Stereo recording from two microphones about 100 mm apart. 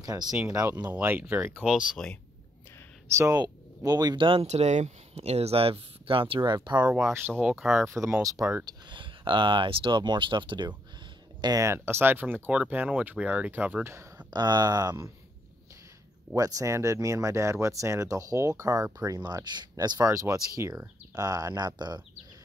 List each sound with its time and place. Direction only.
0.0 s speech: 40° right (ahead or behind)
0.8 s speech: 20° right (ahead or behind)
1.6 s speech: 5° right (ahead or behind)
3.1 s speech: 30° right (ahead or behind)
3.3 s speech: 40° right (ahead or behind)
4.2 s speech: 70° right (ahead or behind); by 6.9 s 45° right (ahead or behind)
6.9 s speech: 5° right (ahead or behind)
7.8 s speech: 25° right (ahead or behind)
8.9 s speech: 55° right (ahead or behind)
11.4 s speech: 30° right (ahead or behind)
14.3 s speech: 45° right (ahead or behind)
16.3 s speech: 35° right (ahead or behind)
20.1 s speech: 35° right (ahead or behind)